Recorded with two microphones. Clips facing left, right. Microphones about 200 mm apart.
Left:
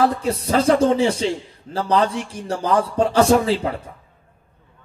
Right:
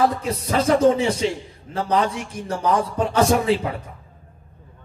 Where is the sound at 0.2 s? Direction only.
30° left (ahead or behind).